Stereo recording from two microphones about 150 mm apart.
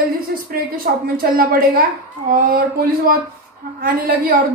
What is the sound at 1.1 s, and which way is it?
Speech, 90° right.